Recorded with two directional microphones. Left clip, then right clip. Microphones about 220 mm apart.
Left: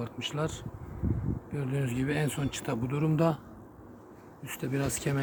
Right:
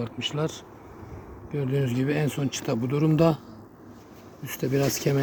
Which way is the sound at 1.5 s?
25° right (ahead or behind).